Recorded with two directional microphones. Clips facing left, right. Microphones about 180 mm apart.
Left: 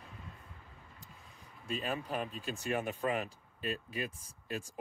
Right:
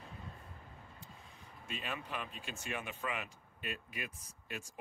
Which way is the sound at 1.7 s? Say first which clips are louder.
Left 6 dB; 40° left (ahead or behind).